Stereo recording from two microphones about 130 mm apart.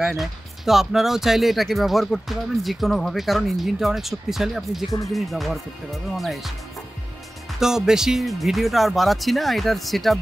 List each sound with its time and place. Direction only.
0.2 s speech: centre (ahead or behind)
7.6 s speech: 5° right (ahead or behind)